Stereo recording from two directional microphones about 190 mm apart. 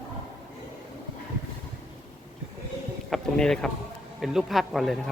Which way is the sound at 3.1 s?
5° left (ahead or behind).